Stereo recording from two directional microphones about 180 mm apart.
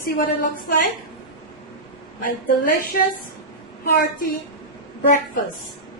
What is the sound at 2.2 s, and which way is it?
Speech, 50° left (ahead or behind).